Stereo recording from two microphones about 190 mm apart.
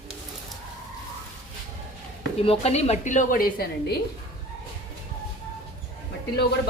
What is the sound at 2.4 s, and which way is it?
A woman's voice, 30° left (ahead or behind).